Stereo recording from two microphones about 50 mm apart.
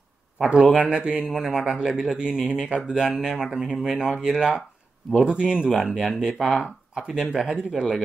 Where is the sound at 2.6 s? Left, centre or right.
Centre.